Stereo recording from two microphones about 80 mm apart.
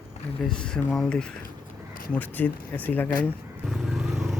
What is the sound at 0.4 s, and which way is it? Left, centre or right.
Speech, centre.